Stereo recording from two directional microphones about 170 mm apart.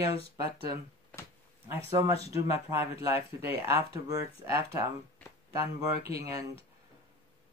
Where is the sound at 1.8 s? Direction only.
20° right (ahead or behind).